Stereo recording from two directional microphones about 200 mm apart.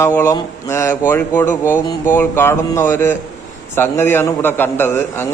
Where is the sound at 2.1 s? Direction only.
10° left (ahead or behind).